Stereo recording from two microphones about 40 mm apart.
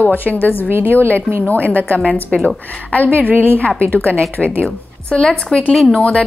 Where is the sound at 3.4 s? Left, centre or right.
Left.